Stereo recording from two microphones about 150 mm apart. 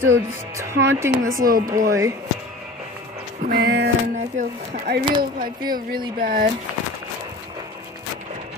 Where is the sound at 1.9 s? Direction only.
20° right (ahead or behind).